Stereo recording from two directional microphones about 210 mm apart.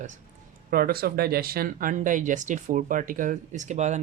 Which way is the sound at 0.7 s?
45° right (ahead or behind).